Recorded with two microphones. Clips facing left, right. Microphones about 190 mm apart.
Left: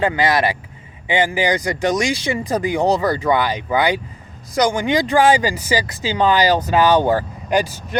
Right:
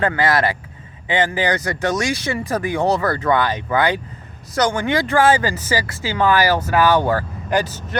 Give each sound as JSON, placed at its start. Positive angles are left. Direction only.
{"t": 0.0, "sound": "speech", "side_deg": 15}